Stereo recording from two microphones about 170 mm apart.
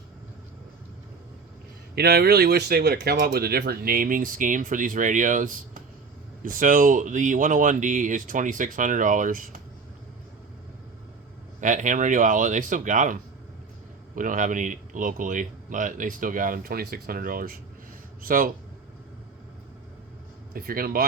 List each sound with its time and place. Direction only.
2.0 s speech: 70° right (ahead or behind); by 9.6 s 50° right (ahead or behind)
11.6 s speech: 50° right (ahead or behind)
14.2 s speech: 50° right (ahead or behind)
20.5 s speech: 60° right (ahead or behind)